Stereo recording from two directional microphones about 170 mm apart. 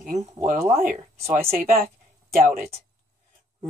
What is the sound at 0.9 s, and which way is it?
Speech, 40° right (ahead or behind).